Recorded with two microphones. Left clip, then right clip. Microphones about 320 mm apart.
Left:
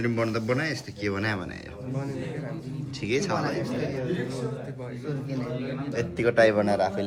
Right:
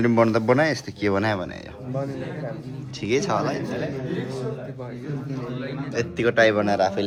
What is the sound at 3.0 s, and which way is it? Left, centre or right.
Speech, centre.